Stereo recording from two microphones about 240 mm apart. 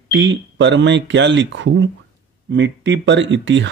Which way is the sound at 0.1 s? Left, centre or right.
Right.